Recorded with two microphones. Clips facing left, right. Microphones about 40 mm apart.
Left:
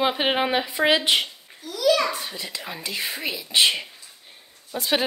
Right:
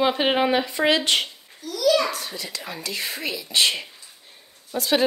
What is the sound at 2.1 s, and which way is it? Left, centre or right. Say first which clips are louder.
A child's voice: even; left.